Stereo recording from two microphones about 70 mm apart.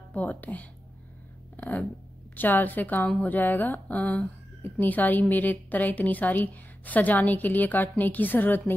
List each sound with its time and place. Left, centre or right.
0.1 s a woman's voice: left